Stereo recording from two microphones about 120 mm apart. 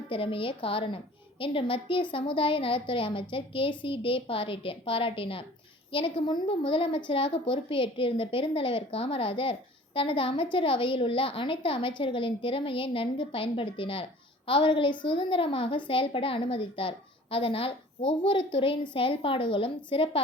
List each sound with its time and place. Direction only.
0.1 s a woman's voice: 50° left (ahead or behind)